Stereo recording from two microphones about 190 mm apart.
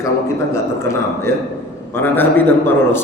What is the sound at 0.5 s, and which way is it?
A man's voice, 15° left (ahead or behind).